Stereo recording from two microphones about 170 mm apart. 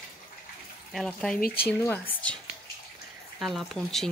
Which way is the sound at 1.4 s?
60° left (ahead or behind).